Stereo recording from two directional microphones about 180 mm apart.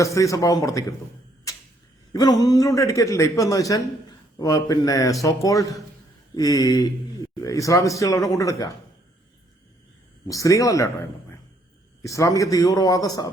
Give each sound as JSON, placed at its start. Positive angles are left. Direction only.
{"t": 0.0, "sound": "speech", "side_deg": 15}
{"t": 1.5, "sound": "a sound", "side_deg": 20}
{"t": 2.1, "sound": "a man's voice", "side_deg": 20}
{"t": 10.2, "sound": "a man's voice", "side_deg": 15}